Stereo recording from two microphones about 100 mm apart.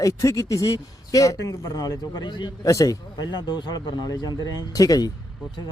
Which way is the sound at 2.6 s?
35° left (ahead or behind).